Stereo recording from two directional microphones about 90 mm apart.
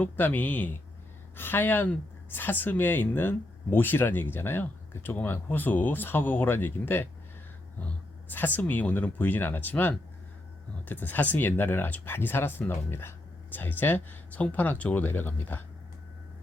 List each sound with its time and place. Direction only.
0.0 s speech: 20° left (ahead or behind)